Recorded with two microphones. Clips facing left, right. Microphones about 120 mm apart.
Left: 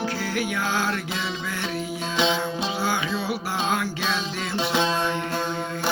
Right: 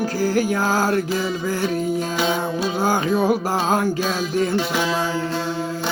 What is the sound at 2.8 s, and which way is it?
Music, 50° right (ahead or behind).